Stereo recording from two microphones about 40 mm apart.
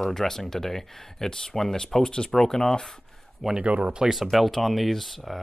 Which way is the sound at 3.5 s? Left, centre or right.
Right.